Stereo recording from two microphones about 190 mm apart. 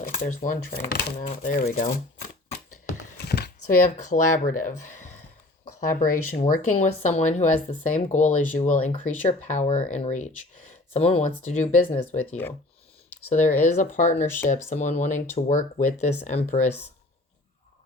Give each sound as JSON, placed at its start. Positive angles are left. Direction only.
{"t": 0.0, "sound": "a sound", "side_deg": 50}
{"t": 0.3, "sound": "speech", "side_deg": 45}
{"t": 3.2, "sound": "a sound", "side_deg": 60}
{"t": 3.8, "sound": "speech", "side_deg": 40}
{"t": 6.5, "sound": "speech", "side_deg": 40}
{"t": 13.4, "sound": "speech", "side_deg": 10}
{"t": 13.7, "sound": "speech", "side_deg": 40}